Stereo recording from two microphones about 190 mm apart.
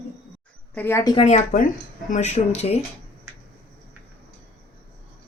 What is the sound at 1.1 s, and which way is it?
A woman's voice, 35° left (ahead or behind).